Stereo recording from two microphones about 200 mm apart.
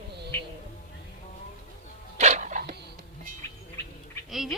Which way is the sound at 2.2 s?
35° right (ahead or behind).